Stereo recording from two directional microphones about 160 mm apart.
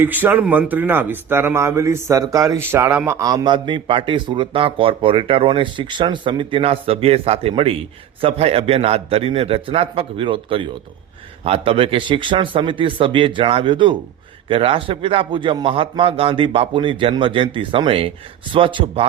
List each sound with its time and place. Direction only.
0.0 s a man's voice: 10° right (ahead or behind); by 19.0 s 35° right (ahead or behind)